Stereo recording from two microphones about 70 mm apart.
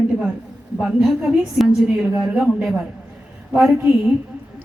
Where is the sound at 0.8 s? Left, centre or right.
Centre.